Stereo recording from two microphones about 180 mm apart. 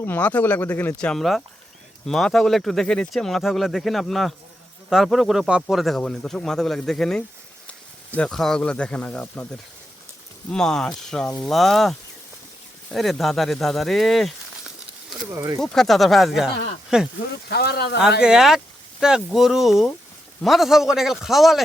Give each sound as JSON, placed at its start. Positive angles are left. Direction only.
{"t": 0.0, "sound": "speech", "side_deg": 10}
{"t": 10.5, "sound": "speech", "side_deg": 5}
{"t": 15.3, "sound": "speech", "side_deg": -20}
{"t": 15.6, "sound": "speech", "side_deg": 0}
{"t": 17.5, "sound": "speech", "side_deg": 65}
{"t": 18.2, "sound": "speech", "side_deg": -5}